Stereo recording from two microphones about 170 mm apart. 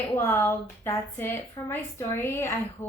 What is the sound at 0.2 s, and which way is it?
Speech, 15° left (ahead or behind).